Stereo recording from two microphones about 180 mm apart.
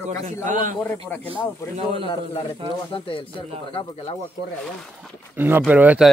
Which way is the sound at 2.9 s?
30° left (ahead or behind).